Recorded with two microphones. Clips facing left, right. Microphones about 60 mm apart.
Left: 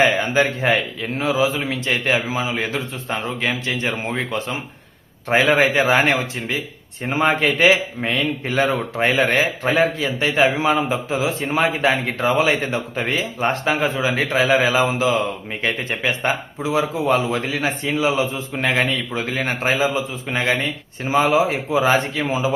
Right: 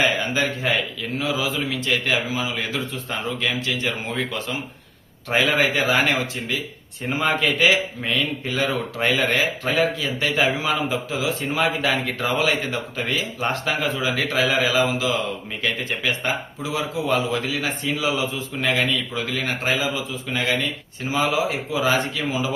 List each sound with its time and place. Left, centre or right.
0.0 s speech: left